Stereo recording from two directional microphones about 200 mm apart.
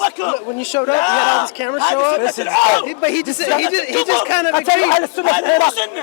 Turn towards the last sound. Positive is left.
turn(degrees=20)  # may be behind; listen again after turning